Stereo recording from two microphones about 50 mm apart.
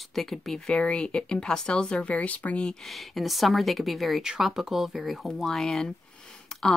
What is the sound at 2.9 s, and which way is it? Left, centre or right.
A woman's voice, centre.